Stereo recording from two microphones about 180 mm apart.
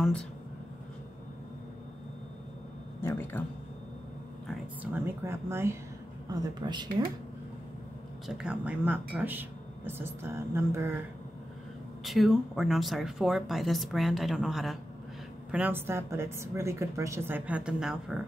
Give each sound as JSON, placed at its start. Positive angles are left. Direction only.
{"t": 3.0, "sound": "speech", "side_deg": 10}
{"t": 4.9, "sound": "speech", "side_deg": -15}
{"t": 6.3, "sound": "speech", "side_deg": -25}
{"t": 8.3, "sound": "speech", "side_deg": -5}
{"t": 12.0, "sound": "speech", "side_deg": 0}